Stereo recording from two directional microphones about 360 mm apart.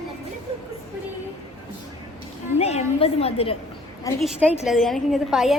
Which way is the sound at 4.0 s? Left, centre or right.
Centre.